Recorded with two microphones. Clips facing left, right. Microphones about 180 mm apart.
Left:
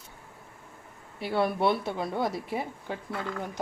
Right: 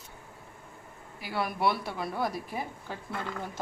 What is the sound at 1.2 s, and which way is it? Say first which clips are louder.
A woman's voice: left 4 dB; 25° left (ahead or behind).